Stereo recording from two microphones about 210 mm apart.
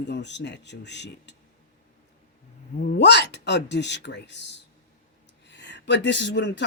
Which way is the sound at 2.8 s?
50° left (ahead or behind).